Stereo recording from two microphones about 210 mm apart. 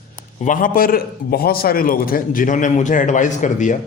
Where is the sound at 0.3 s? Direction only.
40° left (ahead or behind).